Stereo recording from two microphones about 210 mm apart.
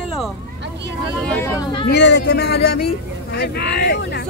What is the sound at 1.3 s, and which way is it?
Speech, 10° left (ahead or behind).